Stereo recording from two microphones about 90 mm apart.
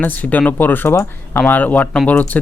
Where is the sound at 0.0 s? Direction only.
20° left (ahead or behind).